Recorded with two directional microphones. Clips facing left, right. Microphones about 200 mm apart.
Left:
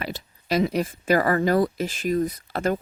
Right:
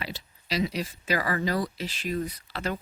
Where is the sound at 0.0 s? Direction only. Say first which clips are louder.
Left 5 dB; 50° left (ahead or behind).